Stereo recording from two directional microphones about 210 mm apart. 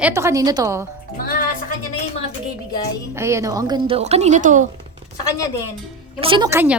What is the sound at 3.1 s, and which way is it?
A child's voice, 15° right (ahead or behind).